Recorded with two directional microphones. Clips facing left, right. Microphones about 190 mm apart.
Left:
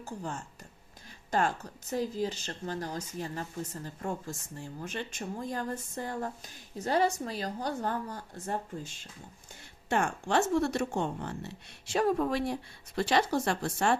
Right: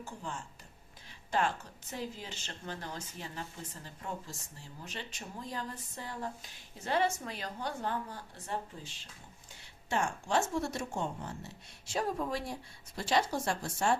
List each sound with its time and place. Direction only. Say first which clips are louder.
0.0 s a woman's voice: left 4 dB; 45° left (ahead or behind)
9.9 s a woman's voice: left 3 dB; 60° left (ahead or behind)